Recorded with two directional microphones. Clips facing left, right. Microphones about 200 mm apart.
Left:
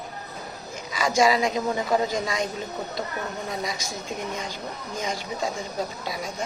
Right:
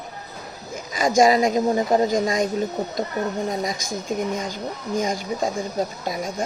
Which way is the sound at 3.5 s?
50° right (ahead or behind).